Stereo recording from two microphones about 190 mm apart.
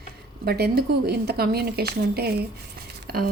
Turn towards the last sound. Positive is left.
turn(degrees=-55)  # may be behind; listen again after turning